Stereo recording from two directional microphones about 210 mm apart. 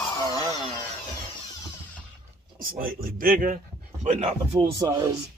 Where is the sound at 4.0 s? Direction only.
30° right (ahead or behind).